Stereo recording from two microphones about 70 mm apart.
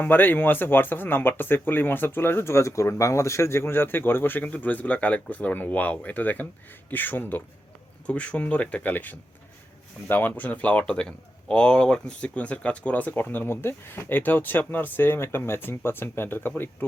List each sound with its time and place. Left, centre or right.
0.0 s speech: left